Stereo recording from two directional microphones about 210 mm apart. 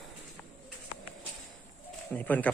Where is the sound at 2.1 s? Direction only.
5° left (ahead or behind).